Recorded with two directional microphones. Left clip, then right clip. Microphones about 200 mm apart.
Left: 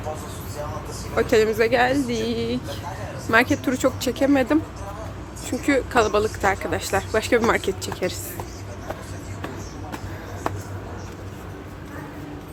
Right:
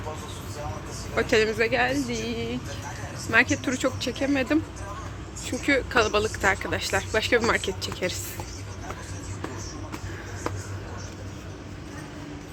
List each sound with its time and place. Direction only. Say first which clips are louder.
1.1 s a woman's voice: left 4 dB; 5° left (ahead or behind)